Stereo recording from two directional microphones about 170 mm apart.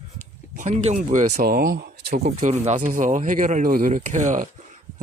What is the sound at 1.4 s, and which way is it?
Speech, 60° right (ahead or behind).